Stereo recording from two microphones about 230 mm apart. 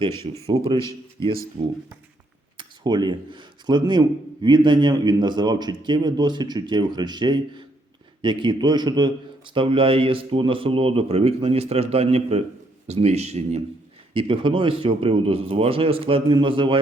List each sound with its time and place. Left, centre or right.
0.4 s a man's voice: right